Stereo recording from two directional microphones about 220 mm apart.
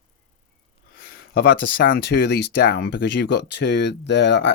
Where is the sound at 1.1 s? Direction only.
45° left (ahead or behind).